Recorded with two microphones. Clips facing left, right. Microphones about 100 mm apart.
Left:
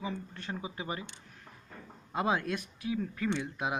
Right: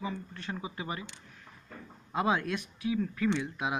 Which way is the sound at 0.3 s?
30° left (ahead or behind).